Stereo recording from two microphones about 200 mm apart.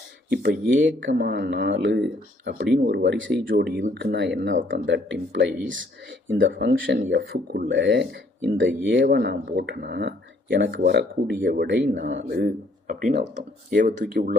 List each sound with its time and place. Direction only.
0.3 s speech: 60° right (ahead or behind)
7.7 s speech: 65° right (ahead or behind)
12.9 s speech: 35° right (ahead or behind)